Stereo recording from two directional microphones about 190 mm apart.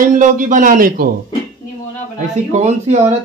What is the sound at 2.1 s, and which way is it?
Speech, 35° right (ahead or behind).